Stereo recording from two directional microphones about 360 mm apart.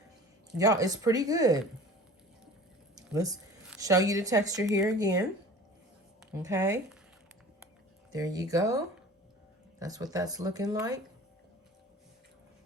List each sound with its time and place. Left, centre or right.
0.6 s speech: centre
2.9 s speech: centre
6.3 s speech: centre
8.1 s speech: centre